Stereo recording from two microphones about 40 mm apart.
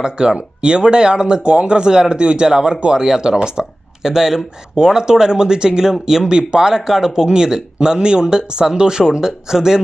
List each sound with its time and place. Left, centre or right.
0.0 s speech: centre